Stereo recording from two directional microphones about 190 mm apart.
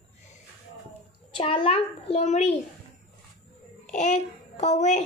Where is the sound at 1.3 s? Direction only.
25° left (ahead or behind).